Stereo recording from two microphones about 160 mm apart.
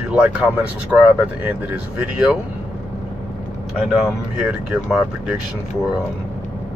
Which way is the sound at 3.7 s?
5° right (ahead or behind).